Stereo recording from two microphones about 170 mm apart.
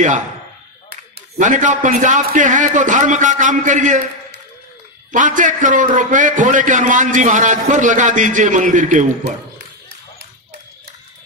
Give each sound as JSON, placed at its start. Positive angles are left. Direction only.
{"t": 1.4, "sound": "a man's voice", "side_deg": -45}
{"t": 5.1, "sound": "a man's voice", "side_deg": -50}